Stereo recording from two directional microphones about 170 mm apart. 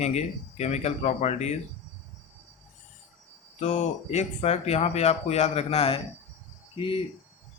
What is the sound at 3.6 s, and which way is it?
Speech, 40° left (ahead or behind).